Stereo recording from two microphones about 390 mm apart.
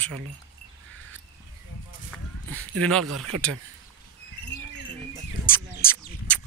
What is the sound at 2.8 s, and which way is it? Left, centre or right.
Speech, centre.